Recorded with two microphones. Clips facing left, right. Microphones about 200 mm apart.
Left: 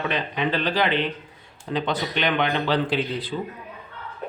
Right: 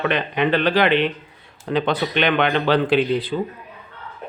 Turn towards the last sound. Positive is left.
turn(degrees=-60)  # may be behind; listen again after turning